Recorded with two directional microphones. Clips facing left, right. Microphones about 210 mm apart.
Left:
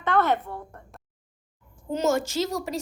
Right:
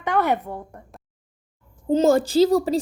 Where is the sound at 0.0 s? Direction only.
15° right (ahead or behind).